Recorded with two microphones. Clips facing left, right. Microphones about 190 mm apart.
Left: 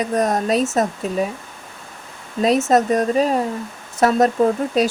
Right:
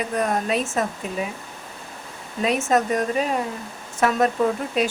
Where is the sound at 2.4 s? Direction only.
35° left (ahead or behind).